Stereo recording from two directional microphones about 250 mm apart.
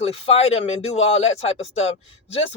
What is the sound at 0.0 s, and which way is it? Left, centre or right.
Speech, left.